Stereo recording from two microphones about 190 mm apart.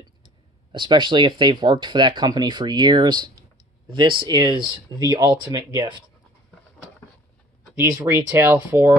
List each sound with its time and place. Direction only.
0.2 s speech: 25° right (ahead or behind)
7.7 s speech: 15° right (ahead or behind)